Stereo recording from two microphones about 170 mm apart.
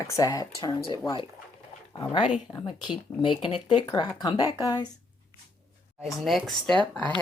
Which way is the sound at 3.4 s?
30° left (ahead or behind).